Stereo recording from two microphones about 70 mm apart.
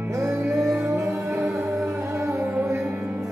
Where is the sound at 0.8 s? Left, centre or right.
Right.